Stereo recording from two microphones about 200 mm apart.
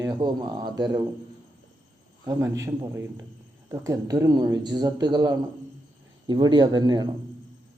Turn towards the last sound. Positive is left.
turn(degrees=-20)  # may be behind; listen again after turning